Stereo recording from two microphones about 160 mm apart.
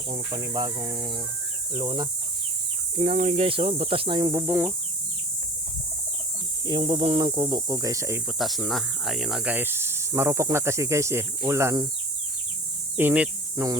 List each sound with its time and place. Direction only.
0.1 s speech: 35° right (ahead or behind)
3.0 s speech: 40° right (ahead or behind); by 4.4 s 25° right (ahead or behind)
4.4 s speech: 10° right (ahead or behind)
6.7 s speech: 30° right (ahead or behind)
8.4 s speech: centre (ahead or behind); by 11.9 s 20° right (ahead or behind)
13.0 s speech: 10° right (ahead or behind)